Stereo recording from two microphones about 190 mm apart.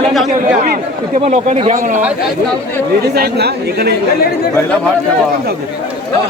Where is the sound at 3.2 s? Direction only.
55° right (ahead or behind).